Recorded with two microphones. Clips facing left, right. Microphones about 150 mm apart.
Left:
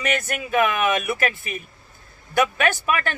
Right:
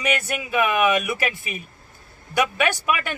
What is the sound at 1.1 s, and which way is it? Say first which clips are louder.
A man's voice: left 2 dB; 45° left (ahead or behind).